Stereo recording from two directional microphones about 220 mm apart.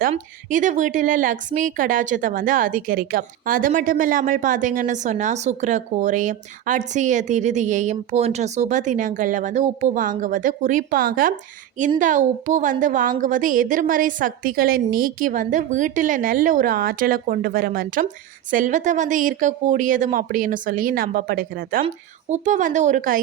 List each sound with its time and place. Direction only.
0.0 s a woman's voice: 35° right (ahead or behind)